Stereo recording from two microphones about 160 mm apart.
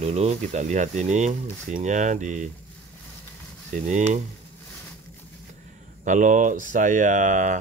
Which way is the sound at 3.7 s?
50° right (ahead or behind).